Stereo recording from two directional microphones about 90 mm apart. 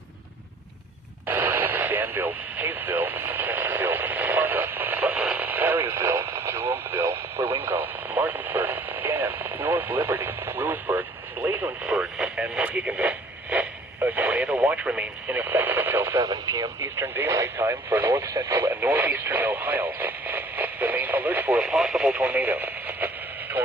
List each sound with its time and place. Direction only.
1.3 s radio: 20° right (ahead or behind)
16.2 s speech: 45° right (ahead or behind)
17.0 s speech: 30° right (ahead or behind)
17.6 s speech: 20° right (ahead or behind)
18.7 s speech: 20° right (ahead or behind)